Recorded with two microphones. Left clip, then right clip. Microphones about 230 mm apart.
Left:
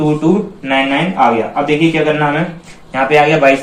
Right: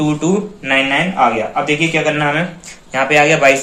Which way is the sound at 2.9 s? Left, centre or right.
Right.